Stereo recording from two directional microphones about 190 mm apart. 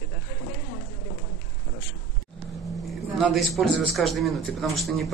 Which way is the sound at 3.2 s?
Centre (ahead or behind).